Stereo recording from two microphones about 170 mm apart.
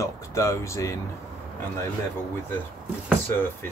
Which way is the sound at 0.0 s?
20° left (ahead or behind).